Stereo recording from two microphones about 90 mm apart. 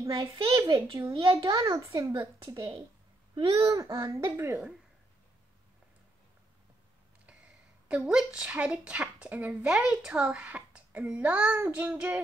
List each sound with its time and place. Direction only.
0.1 s a child's voice: 45° right (ahead or behind)
1.1 s a child's voice: 80° right
1.4 s a child's voice: 40° right (ahead or behind)
4.1 s a woman's voice: 30° right (ahead or behind)
8.0 s speech: 10° right (ahead or behind)